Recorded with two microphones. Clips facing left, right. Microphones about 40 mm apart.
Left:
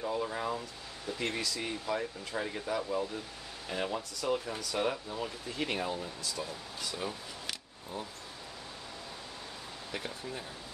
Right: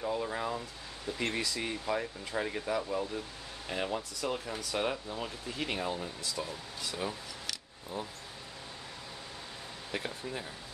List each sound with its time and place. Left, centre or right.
0.0 s speech: centre
5.6 s speech: centre
6.4 s speech: centre
9.9 s speech: centre